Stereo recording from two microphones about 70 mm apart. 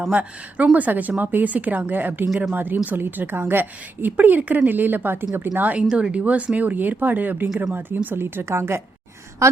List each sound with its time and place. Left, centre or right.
0.1 s a woman's voice: right